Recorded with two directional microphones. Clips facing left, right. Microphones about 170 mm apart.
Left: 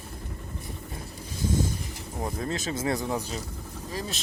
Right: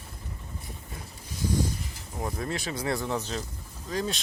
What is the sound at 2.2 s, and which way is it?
Speech, 25° left (ahead or behind).